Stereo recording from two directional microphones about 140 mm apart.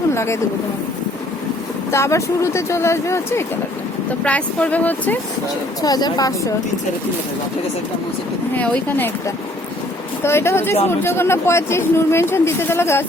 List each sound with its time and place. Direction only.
0.1 s a sound: 20° left (ahead or behind)
1.9 s speech: 20° left (ahead or behind)
4.1 s speech: 10° left (ahead or behind)
5.8 s speech: 30° left (ahead or behind)
8.5 s speech: 10° left (ahead or behind)
10.2 s speech: 20° left (ahead or behind)